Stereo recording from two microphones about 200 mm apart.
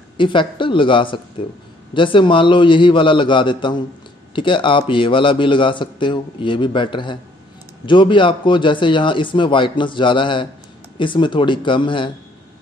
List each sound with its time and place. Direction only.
0.2 s a man's voice: 25° left (ahead or behind)